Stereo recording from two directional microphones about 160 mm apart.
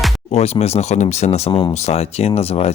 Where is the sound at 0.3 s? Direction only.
40° left (ahead or behind).